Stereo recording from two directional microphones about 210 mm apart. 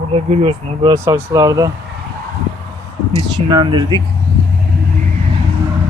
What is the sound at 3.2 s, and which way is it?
Speech, 20° right (ahead or behind).